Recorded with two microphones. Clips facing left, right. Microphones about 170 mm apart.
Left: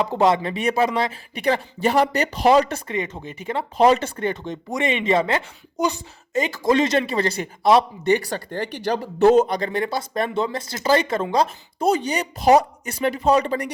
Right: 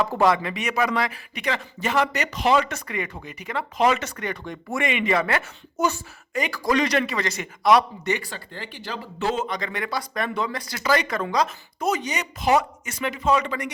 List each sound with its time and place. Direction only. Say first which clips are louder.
0.0 s speech: left 2 dB; 20° left (ahead or behind)